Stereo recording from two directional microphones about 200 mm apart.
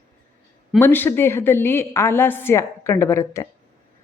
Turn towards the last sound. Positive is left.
turn(degrees=15)  # may be behind; listen again after turning